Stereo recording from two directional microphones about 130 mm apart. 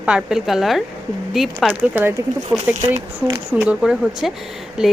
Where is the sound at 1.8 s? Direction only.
15° right (ahead or behind).